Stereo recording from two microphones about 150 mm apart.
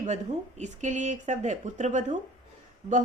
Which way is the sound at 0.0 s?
50° right (ahead or behind).